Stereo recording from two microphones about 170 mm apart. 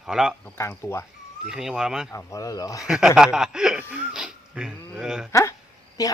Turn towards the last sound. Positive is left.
turn(degrees=20)  # may be behind; listen again after turning